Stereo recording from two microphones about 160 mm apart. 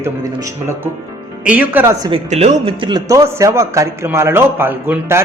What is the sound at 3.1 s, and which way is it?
A man's voice, 15° right (ahead or behind).